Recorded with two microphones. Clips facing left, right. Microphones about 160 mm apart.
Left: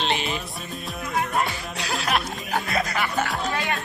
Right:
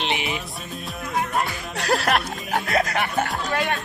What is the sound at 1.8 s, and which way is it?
Speech, 60° right (ahead or behind).